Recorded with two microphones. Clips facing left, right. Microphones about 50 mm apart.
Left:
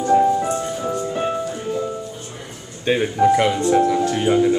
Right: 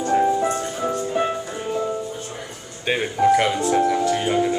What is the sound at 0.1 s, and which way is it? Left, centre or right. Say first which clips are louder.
Music: left 3 dB; right.